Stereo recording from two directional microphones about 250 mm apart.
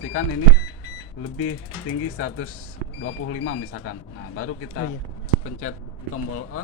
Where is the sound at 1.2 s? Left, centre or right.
Left.